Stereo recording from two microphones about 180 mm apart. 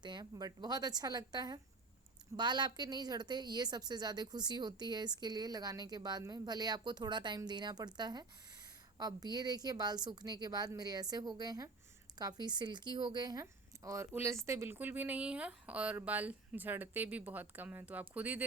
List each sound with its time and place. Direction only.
0.0 s speech: 25° right (ahead or behind); by 18.4 s 10° right (ahead or behind)